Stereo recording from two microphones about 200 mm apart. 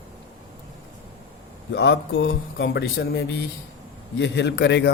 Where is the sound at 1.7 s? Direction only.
60° left (ahead or behind).